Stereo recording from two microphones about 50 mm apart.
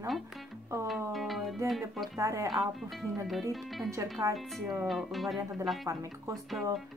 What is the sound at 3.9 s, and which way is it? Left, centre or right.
Speech, right.